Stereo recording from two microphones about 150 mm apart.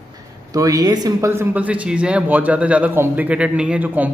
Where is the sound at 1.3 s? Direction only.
10° right (ahead or behind).